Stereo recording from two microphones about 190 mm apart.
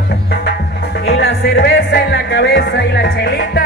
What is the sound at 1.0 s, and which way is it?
Music, 60° left (ahead or behind).